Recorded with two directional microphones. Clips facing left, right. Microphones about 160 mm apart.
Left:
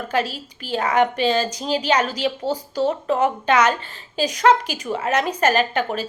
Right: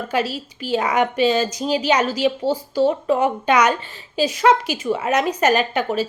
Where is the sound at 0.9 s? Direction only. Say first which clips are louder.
Left 1 dB; 40° left (ahead or behind).